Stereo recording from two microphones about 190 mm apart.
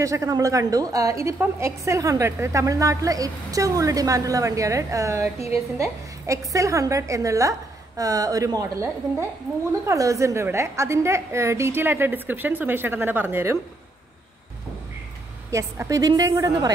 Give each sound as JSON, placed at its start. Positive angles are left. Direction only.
{"t": 0.0, "sound": "a woman's voice", "side_deg": -15}
{"t": 15.5, "sound": "a woman's voice", "side_deg": -15}